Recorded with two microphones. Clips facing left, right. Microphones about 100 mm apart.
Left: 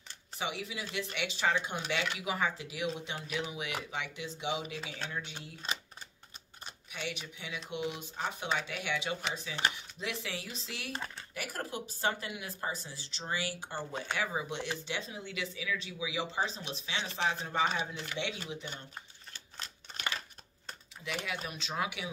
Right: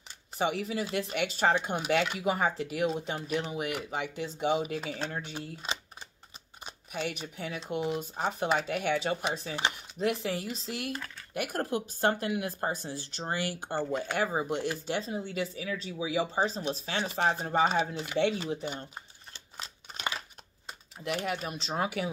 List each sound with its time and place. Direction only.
0.4 s speech: 45° right (ahead or behind)
6.9 s speech: 45° right (ahead or behind)
10.9 s speech: 25° left (ahead or behind)
11.3 s speech: 55° right (ahead or behind)
17.6 s speech: 40° right (ahead or behind)
18.7 s a sound: 20° right (ahead or behind)
21.0 s speech: 50° right (ahead or behind)